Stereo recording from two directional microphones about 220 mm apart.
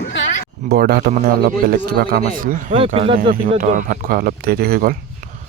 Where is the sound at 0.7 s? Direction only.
45° right (ahead or behind).